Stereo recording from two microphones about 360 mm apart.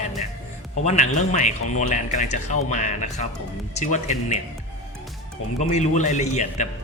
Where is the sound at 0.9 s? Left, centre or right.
Centre.